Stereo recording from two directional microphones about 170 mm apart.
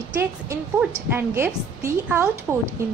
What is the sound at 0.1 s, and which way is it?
A woman's voice, 15° right (ahead or behind).